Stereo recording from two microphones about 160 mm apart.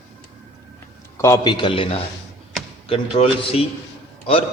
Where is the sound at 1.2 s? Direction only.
25° left (ahead or behind).